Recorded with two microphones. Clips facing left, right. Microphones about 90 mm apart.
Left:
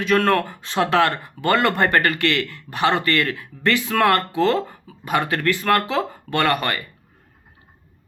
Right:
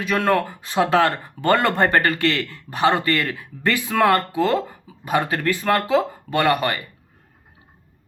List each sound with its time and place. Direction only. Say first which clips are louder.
0.1 s speech: left 1 dB; 15° right (ahead or behind)